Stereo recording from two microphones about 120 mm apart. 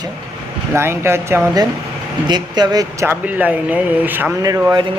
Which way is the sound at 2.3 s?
35° right (ahead or behind).